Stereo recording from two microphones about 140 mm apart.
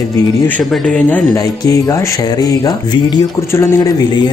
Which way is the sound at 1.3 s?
25° left (ahead or behind).